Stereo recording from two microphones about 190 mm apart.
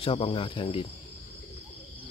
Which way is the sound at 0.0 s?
30° left (ahead or behind).